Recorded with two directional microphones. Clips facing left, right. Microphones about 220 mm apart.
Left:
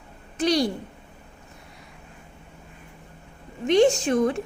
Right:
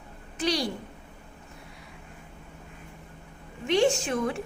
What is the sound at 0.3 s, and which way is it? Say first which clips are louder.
Speech: left 6 dB; 45° left (ahead or behind).